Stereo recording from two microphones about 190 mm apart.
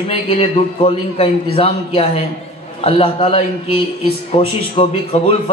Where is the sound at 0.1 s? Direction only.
30° left (ahead or behind).